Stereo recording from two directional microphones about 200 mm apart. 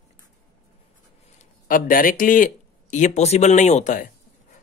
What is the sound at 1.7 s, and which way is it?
Speech, 45° left (ahead or behind).